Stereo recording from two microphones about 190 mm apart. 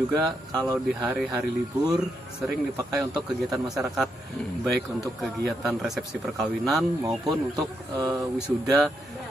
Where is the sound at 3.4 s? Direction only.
Centre (ahead or behind).